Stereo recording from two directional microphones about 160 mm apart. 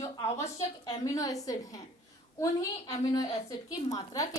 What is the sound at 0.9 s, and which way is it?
Speech, 20° left (ahead or behind).